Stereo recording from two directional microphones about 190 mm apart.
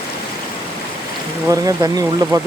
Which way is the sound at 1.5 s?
20° right (ahead or behind).